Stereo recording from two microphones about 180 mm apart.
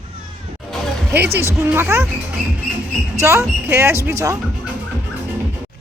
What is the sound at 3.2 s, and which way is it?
Speech, 15° right (ahead or behind).